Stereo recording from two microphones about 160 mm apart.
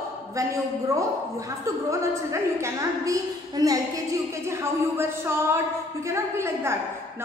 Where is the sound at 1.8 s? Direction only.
20° right (ahead or behind).